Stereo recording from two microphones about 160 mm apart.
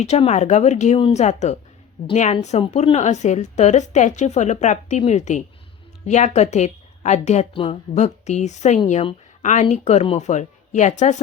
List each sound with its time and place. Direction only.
0.0 s a woman's voice: 45° left (ahead or behind)